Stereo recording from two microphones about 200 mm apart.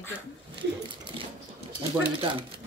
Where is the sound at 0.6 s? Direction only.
25° right (ahead or behind).